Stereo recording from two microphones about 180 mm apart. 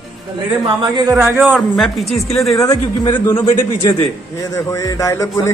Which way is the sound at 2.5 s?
20° left (ahead or behind).